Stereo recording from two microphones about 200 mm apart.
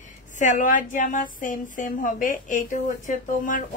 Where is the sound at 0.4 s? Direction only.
40° left (ahead or behind).